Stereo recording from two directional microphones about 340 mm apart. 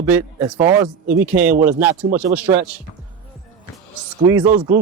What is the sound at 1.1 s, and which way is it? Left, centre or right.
Speech, right.